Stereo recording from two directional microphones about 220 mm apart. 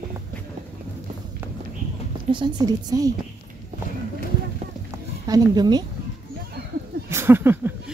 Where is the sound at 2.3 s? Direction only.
20° right (ahead or behind).